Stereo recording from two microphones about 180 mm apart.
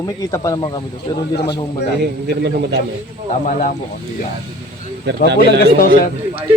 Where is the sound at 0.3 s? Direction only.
15° left (ahead or behind).